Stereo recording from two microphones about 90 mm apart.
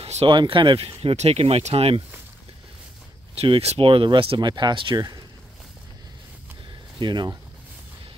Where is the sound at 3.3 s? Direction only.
90° right; by 5.0 s 65° right (ahead or behind).